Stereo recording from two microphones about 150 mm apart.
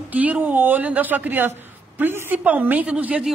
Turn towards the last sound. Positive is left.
turn(degrees=-10)  # may be behind; listen again after turning